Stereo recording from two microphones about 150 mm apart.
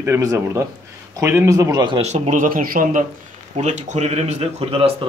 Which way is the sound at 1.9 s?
50° right (ahead or behind).